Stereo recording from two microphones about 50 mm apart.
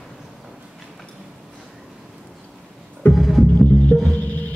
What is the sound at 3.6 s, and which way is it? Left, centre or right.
Music, left.